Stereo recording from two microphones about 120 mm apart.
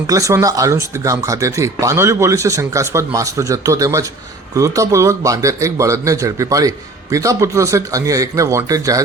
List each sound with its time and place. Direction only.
0.1 s speech: 25° right (ahead or behind)